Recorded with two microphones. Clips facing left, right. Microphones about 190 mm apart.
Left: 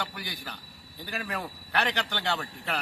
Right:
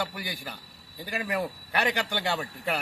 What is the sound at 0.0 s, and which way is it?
A man's voice, 10° right (ahead or behind).